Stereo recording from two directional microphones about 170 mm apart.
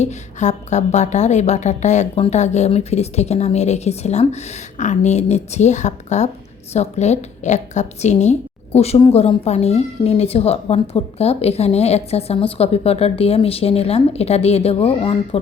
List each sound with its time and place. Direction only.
0.0 s a woman's voice: 45° left (ahead or behind)